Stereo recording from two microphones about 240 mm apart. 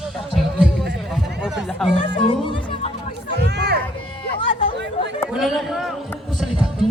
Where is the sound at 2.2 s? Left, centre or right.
Left.